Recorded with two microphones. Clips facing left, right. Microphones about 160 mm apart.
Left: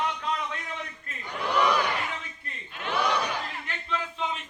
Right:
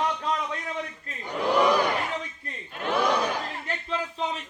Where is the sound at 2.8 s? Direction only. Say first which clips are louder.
Right 3 dB; 50° right (ahead or behind).